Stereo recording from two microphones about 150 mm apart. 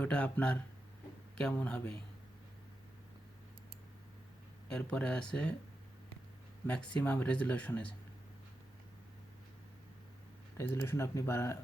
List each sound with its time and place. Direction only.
0.0 s speech: 10° left (ahead or behind)
4.7 s speech: 5° left (ahead or behind)
6.7 s speech: 5° left (ahead or behind)
10.6 s speech: 15° left (ahead or behind)